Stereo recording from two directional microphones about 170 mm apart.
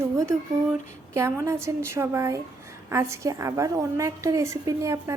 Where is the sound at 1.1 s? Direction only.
15° right (ahead or behind).